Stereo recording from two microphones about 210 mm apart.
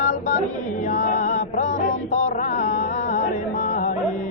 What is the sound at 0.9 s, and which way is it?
Music, 40° left (ahead or behind).